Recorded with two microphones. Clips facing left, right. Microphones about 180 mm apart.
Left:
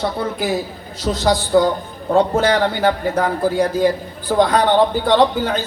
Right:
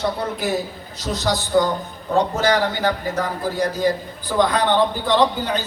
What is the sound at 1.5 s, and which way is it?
A woman's voice, 55° left (ahead or behind).